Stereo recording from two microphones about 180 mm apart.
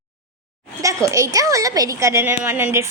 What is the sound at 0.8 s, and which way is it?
A woman's voice, 15° right (ahead or behind).